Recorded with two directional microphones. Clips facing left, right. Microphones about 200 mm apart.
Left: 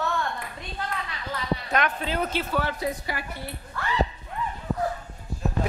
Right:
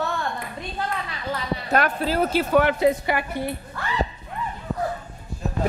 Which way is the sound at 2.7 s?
70° right (ahead or behind).